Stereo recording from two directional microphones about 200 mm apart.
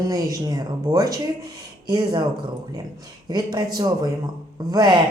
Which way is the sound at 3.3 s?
20° right (ahead or behind).